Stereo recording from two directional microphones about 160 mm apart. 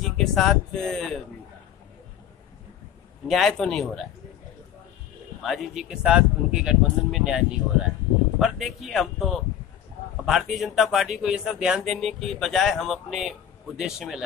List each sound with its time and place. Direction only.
0.0 s speech: centre (ahead or behind)
3.3 s speech: centre (ahead or behind)
5.4 s speech: centre (ahead or behind)